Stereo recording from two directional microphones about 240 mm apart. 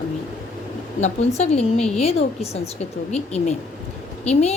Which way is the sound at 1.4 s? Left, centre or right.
Left.